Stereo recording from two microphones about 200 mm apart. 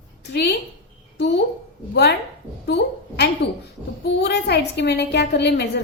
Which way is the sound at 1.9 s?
55° left (ahead or behind).